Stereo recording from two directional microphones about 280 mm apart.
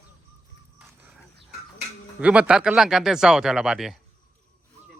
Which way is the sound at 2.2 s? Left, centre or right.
Centre.